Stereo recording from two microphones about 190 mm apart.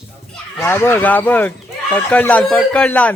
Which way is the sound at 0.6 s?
10° left (ahead or behind).